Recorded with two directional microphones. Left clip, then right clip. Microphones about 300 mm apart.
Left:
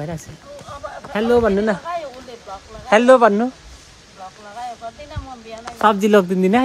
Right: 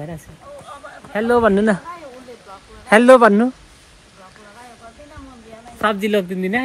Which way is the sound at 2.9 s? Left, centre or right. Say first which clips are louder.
Right 2 dB; right.